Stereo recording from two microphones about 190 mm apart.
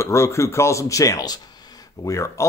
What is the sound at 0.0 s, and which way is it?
A man's voice, 15° left (ahead or behind).